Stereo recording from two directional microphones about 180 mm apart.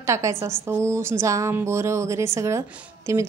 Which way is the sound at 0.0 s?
15° right (ahead or behind).